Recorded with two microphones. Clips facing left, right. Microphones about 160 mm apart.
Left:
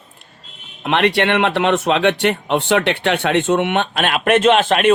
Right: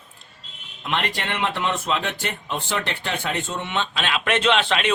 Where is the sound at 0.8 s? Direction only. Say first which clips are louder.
Left 11 dB; 70° left (ahead or behind).